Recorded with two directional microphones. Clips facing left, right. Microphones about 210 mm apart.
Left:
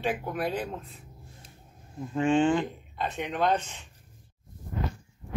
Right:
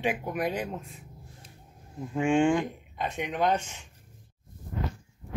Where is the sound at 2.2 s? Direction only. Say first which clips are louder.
Even; 10° right (ahead or behind).